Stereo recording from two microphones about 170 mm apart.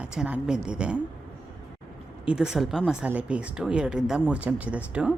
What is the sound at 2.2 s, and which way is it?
A woman's voice, 5° right (ahead or behind).